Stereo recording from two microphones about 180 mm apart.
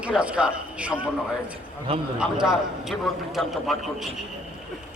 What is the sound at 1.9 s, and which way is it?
Speech, 30° right (ahead or behind).